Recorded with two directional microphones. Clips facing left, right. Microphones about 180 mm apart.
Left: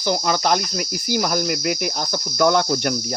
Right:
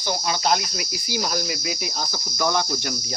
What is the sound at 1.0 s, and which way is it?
Cricket, 55° left (ahead or behind).